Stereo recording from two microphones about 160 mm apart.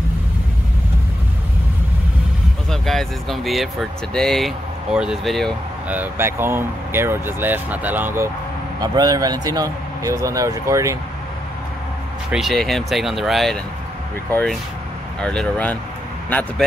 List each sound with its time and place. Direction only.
2.7 s speech: centre (ahead or behind)
5.9 s speech: 10° right (ahead or behind)
12.3 s speech: centre (ahead or behind)
15.1 s speech: 5° left (ahead or behind)